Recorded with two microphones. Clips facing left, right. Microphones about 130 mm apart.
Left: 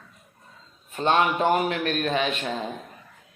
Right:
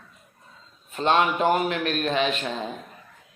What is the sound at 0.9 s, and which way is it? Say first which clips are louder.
Speech: even; 35° right (ahead or behind).